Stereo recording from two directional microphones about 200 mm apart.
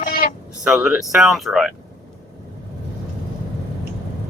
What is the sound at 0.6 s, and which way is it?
Speech, 5° right (ahead or behind).